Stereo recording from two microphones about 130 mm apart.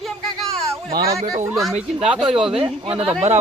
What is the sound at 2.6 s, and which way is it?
Speech, 45° right (ahead or behind).